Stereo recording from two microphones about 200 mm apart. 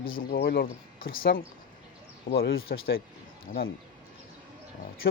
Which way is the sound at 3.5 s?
40° left (ahead or behind).